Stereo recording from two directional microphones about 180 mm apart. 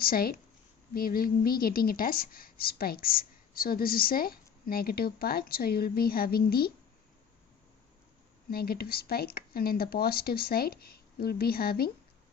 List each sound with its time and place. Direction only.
0.0 s a woman's voice: 55° left (ahead or behind)
8.4 s speech: 55° left (ahead or behind)